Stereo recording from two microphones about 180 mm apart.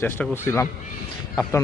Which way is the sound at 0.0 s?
15° left (ahead or behind).